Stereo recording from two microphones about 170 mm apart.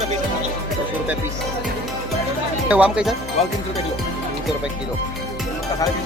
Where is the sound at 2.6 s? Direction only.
10° right (ahead or behind).